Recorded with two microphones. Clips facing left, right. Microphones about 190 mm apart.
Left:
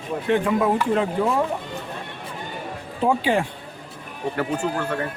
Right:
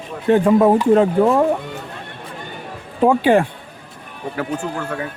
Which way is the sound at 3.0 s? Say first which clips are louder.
Right 7 dB; 55° right (ahead or behind).